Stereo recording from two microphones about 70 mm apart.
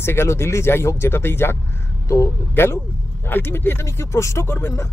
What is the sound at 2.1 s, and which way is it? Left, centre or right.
Speech, left.